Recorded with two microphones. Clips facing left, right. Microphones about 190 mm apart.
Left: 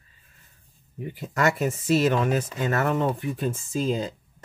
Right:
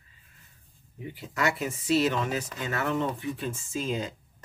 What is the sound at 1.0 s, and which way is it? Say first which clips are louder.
Speech: left 5 dB; 50° left (ahead or behind).